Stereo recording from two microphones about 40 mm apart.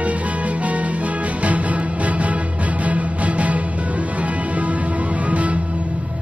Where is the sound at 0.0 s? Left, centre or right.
Right.